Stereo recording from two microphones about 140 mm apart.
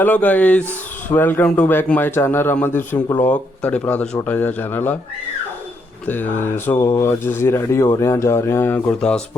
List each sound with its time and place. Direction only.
0.0 s a man's voice: 10° left (ahead or behind)
6.1 s a man's voice: 15° left (ahead or behind)